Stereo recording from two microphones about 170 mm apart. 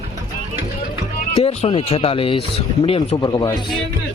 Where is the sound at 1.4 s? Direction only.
35° left (ahead or behind).